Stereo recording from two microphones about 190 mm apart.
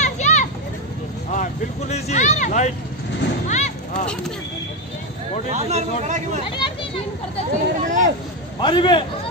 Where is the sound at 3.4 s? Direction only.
35° left (ahead or behind).